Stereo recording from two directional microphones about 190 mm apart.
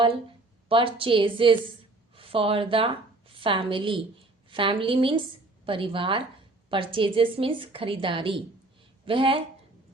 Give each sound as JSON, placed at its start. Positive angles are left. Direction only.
{"t": 0.7, "sound": "a woman's voice", "side_deg": -30}